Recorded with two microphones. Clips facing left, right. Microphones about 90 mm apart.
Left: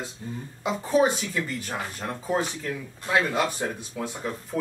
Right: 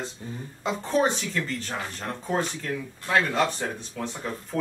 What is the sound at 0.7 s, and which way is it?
Speech, 5° left (ahead or behind).